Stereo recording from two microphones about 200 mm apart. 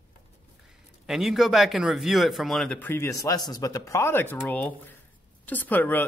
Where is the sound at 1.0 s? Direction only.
Centre (ahead or behind).